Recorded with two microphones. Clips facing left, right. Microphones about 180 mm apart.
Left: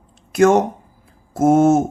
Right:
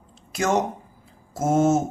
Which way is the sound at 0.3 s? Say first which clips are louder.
Left 9 dB; 60° left (ahead or behind).